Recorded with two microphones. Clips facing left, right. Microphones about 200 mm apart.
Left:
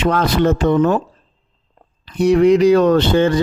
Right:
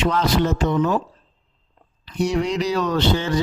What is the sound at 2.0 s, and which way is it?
Speech, 55° left (ahead or behind).